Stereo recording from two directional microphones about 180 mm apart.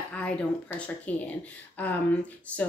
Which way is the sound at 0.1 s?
5° left (ahead or behind).